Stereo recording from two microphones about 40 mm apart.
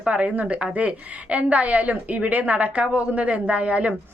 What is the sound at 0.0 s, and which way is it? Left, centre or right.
A woman's voice, right.